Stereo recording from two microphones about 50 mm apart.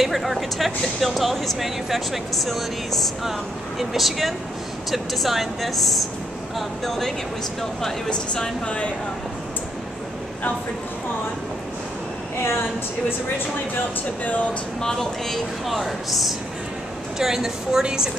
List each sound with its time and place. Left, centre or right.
0.0 s speech: centre
8.1 s speech: centre
14.8 s a woman's voice: centre